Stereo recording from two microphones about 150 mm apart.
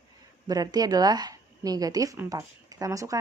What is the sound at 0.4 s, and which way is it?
A woman's voice, 25° right (ahead or behind).